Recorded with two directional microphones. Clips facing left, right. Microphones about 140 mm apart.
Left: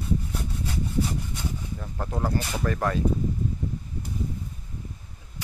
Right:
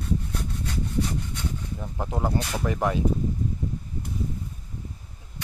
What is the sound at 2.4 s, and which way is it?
Speech, centre (ahead or behind).